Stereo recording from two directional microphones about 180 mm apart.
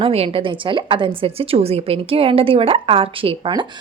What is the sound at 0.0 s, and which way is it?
A woman's voice, 30° right (ahead or behind).